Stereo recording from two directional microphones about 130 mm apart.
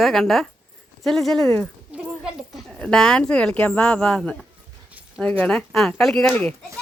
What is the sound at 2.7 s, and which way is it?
Speech, 5° left (ahead or behind).